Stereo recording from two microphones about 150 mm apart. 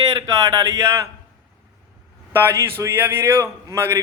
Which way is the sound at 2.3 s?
15° right (ahead or behind).